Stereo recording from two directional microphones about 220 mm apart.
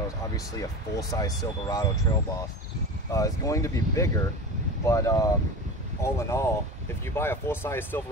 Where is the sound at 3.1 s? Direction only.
15° left (ahead or behind).